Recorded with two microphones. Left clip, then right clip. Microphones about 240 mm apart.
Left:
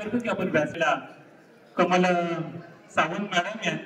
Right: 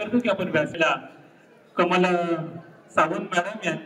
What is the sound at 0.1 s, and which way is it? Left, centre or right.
Speech, right.